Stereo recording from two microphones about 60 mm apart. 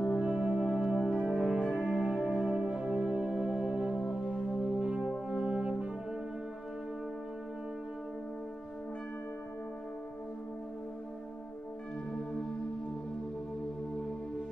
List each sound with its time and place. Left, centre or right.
0.2 s music: centre
5.3 s brass instrument: centre